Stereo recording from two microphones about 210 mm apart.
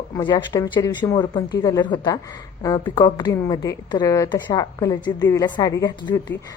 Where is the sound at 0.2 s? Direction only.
20° left (ahead or behind).